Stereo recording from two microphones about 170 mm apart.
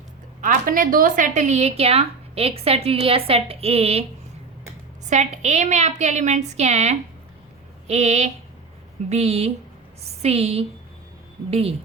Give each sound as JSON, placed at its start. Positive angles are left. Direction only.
{"t": 0.4, "sound": "a woman's voice", "side_deg": -55}
{"t": 5.0, "sound": "a woman's voice", "side_deg": -45}